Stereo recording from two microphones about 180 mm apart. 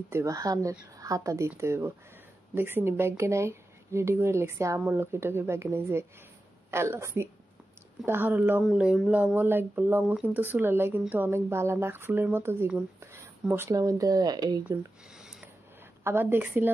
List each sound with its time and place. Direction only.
0.1 s speech: 20° right (ahead or behind)
14.6 s a sound: 10° right (ahead or behind)
16.0 s speech: 15° right (ahead or behind)